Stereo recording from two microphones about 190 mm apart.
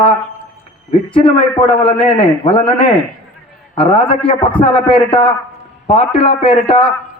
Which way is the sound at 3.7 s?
30° left (ahead or behind).